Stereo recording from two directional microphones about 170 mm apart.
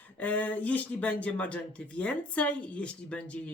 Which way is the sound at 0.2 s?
10° left (ahead or behind).